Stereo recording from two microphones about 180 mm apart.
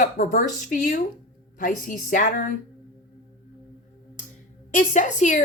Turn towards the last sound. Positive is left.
turn(degrees=45)  # may be behind; listen again after turning